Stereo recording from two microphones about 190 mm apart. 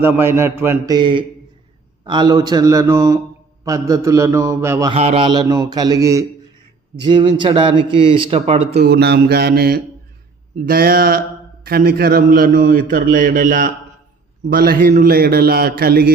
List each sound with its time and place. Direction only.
0.0 s a man's voice: 10° right (ahead or behind)
4.9 s a man's voice: 30° right (ahead or behind)
8.8 s mantra: 55° right (ahead or behind)
10.7 s a man's voice: 50° right (ahead or behind)